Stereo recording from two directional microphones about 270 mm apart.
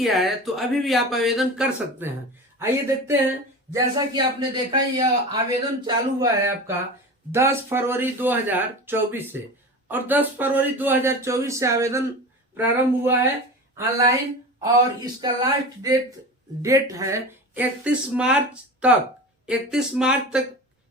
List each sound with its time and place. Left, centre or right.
0.0 s speech: centre
15.2 s speech: centre